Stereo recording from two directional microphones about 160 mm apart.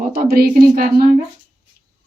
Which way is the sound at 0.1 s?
65° right (ahead or behind).